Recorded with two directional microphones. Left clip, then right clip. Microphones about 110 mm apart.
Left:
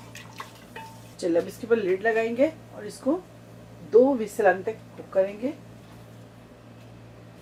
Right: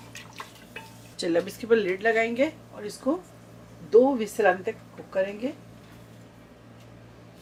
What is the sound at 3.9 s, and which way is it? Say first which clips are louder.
Speech: even; 45° right (ahead or behind).